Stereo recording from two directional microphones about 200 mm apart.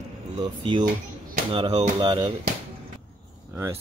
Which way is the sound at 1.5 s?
20° right (ahead or behind).